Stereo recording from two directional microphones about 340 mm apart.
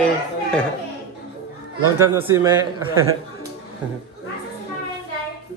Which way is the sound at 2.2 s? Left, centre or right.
Centre.